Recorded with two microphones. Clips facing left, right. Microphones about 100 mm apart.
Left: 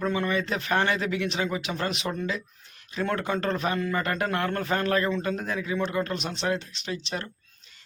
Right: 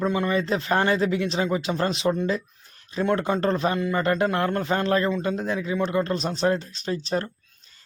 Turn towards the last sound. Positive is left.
turn(degrees=-35)  # may be behind; listen again after turning